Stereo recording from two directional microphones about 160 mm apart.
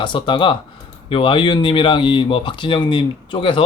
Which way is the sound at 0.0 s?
30° left (ahead or behind).